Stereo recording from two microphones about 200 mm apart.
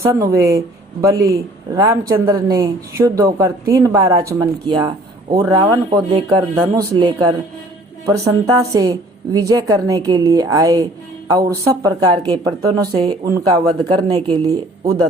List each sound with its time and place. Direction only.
0.0 s speech: 15° right (ahead or behind)